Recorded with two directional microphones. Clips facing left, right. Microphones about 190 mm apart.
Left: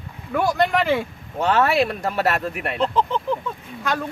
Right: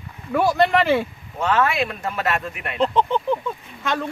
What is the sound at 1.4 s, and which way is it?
Speech, 40° left (ahead or behind).